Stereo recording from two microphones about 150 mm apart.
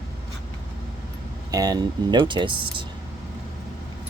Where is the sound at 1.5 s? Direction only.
25° right (ahead or behind).